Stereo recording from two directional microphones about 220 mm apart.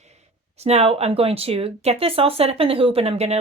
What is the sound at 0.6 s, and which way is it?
Speech, 30° right (ahead or behind).